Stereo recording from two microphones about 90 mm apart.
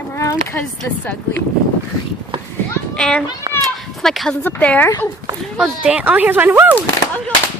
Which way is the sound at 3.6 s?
5° left (ahead or behind).